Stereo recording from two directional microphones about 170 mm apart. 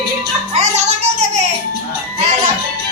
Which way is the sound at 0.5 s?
40° right (ahead or behind).